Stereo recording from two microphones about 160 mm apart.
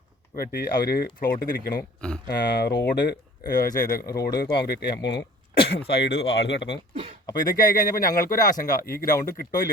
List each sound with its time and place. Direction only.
0.3 s speech: 80° left
2.2 s speech: 80° left
3.6 s speech: 65° left (ahead or behind); by 6.7 s 90° left
7.5 s speech: 60° left (ahead or behind)